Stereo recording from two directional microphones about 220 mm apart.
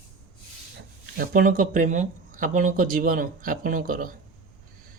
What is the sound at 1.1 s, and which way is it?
Speech, 40° right (ahead or behind).